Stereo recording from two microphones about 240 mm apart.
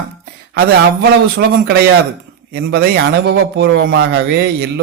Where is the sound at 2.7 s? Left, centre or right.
Right.